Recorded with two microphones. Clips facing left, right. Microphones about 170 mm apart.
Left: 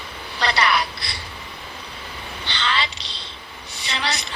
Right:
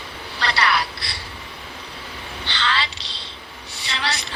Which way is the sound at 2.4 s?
15° left (ahead or behind).